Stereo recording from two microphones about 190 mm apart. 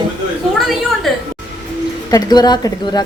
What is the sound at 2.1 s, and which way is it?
Speech, 20° left (ahead or behind).